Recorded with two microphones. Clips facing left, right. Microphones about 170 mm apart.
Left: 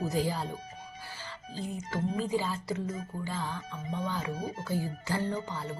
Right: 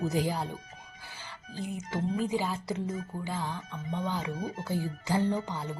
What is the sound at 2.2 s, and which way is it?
A woman's voice, 15° right (ahead or behind).